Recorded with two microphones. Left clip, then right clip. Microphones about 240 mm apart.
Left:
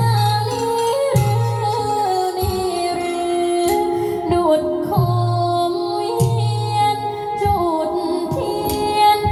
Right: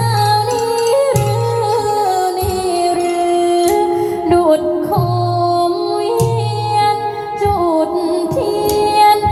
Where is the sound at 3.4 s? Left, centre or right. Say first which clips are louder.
Right 4 dB; right.